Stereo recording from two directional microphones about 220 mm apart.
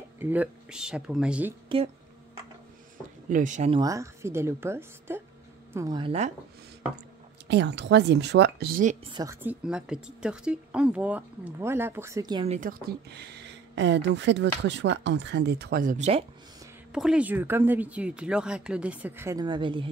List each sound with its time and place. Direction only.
0.2 s speech: 10° right (ahead or behind)
1.7 s speech: 25° right (ahead or behind)
3.3 s speech: 35° right (ahead or behind)
3.8 s speech: 15° right (ahead or behind)
7.4 s speech: 50° right (ahead or behind)
9.1 s speech: 15° right (ahead or behind)
12.5 s speech: 40° right (ahead or behind)
16.9 s speech: 5° right (ahead or behind); by 19.9 s 20° right (ahead or behind)